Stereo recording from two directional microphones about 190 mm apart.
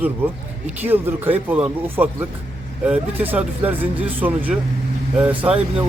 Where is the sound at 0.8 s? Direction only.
10° right (ahead or behind).